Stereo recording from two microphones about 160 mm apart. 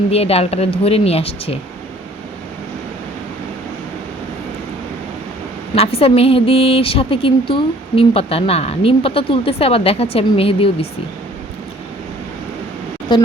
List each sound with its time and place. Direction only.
0.1 s speech: 40° left (ahead or behind)
5.7 s speech: 40° left (ahead or behind)
13.1 s speech: 30° left (ahead or behind)